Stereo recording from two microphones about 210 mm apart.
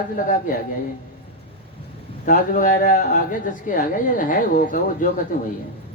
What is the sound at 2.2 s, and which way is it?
Speech, 40° left (ahead or behind).